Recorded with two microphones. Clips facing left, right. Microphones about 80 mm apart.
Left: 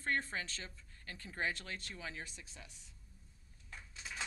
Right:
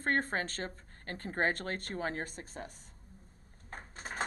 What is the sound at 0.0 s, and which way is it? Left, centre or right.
Speech, right.